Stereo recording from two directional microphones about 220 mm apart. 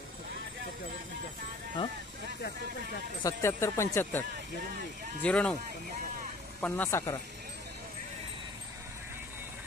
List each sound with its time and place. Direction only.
3.3 s speech: 10° left (ahead or behind)
5.2 s speech: 5° left (ahead or behind)
6.6 s speech: 10° left (ahead or behind)